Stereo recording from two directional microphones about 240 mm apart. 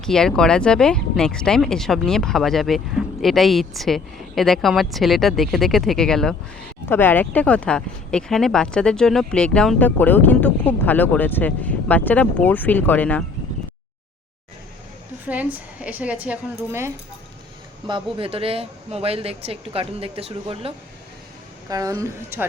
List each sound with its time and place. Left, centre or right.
0.0 s speech: centre
15.2 s a woman's voice: centre
17.8 s a woman's voice: right